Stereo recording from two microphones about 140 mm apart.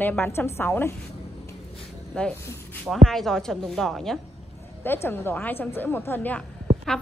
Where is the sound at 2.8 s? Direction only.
5° left (ahead or behind).